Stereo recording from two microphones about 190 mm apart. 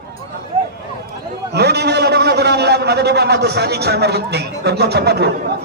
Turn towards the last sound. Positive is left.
turn(degrees=-60)  # may be behind; listen again after turning